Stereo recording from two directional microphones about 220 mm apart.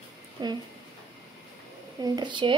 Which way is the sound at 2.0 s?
20° right (ahead or behind).